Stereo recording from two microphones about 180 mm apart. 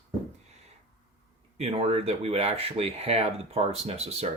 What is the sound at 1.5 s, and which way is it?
Speech, 35° right (ahead or behind).